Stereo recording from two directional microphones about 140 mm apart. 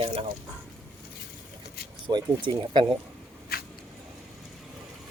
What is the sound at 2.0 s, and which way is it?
Speech, 35° right (ahead or behind).